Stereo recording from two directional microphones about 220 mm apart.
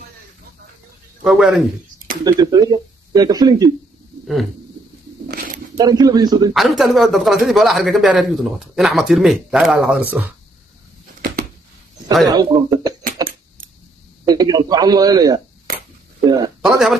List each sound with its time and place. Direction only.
1.2 s speech: centre (ahead or behind)
2.2 s speech: 15° right (ahead or behind)
5.8 s speech: 15° right (ahead or behind)
6.5 s speech: centre (ahead or behind)
12.3 s speech: 15° right (ahead or behind)
13.2 s keys jangling: 15° right (ahead or behind)
14.2 s speech: 15° right (ahead or behind)
16.6 s speech: 5° right (ahead or behind)